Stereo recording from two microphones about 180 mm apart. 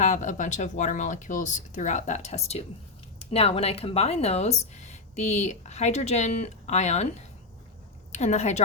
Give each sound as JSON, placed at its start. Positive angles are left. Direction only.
{"t": 0.0, "sound": "speech", "side_deg": 40}